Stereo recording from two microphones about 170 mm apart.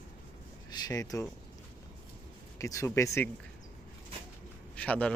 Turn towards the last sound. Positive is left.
turn(degrees=10)  # may be behind; listen again after turning